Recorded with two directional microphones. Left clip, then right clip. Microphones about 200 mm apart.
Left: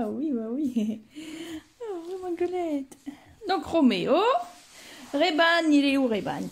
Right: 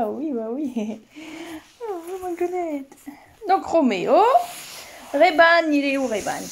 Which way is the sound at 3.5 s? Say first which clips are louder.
Right 5 dB; 15° left (ahead or behind).